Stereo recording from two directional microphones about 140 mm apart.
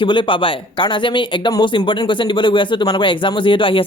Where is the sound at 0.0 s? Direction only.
35° left (ahead or behind).